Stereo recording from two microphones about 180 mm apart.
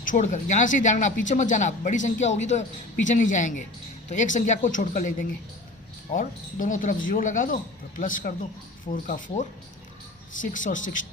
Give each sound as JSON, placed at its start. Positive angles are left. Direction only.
{"t": 0.0, "sound": "speech", "side_deg": 45}